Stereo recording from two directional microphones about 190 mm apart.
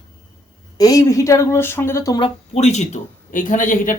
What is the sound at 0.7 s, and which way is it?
Speech, 20° left (ahead or behind).